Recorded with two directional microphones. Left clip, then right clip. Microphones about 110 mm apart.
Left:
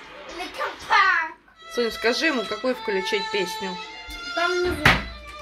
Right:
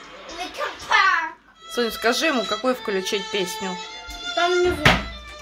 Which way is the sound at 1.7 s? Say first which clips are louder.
Right 1 dB; 20° right (ahead or behind).